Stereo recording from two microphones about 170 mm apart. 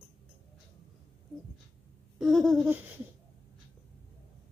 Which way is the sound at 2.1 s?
Centre (ahead or behind).